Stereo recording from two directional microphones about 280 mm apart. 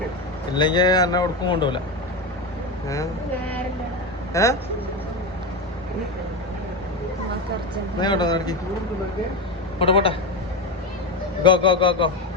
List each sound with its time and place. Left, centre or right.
0.5 s speech: centre
4.4 s speech: centre
8.0 s speech: centre
9.7 s a woman's voice: centre
11.4 s speech: centre